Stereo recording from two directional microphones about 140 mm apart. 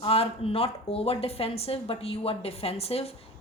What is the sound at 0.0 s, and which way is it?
A woman's voice, 45° left (ahead or behind).